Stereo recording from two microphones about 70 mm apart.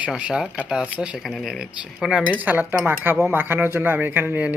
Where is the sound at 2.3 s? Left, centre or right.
Right.